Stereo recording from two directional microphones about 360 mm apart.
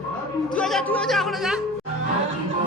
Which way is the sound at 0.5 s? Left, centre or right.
Centre.